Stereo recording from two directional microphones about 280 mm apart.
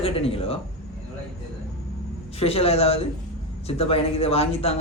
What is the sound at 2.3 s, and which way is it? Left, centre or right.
Speech, left.